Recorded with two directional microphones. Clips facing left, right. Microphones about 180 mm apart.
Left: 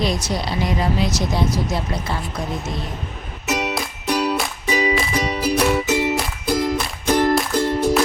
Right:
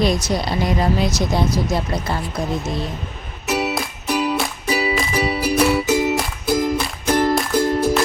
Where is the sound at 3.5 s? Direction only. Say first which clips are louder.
Right 2 dB; 5° right (ahead or behind).